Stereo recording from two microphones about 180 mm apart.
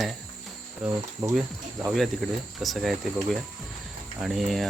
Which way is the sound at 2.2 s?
Centre (ahead or behind).